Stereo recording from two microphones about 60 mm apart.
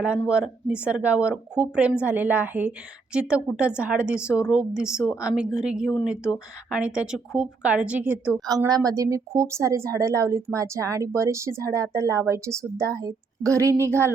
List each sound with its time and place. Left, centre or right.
0.3 s speech: centre
3.1 s a woman's voice: centre
7.6 s a woman's voice: right
8.4 s a woman's voice: right